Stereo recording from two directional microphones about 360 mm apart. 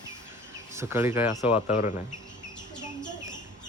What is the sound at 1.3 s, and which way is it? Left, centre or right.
Speech, centre.